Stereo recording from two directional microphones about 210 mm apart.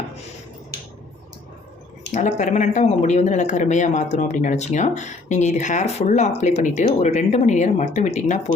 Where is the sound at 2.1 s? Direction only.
35° left (ahead or behind).